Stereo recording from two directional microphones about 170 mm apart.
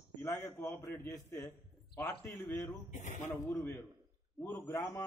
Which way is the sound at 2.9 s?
45° left (ahead or behind).